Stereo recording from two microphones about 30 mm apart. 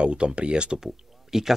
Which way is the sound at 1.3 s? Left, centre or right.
Centre.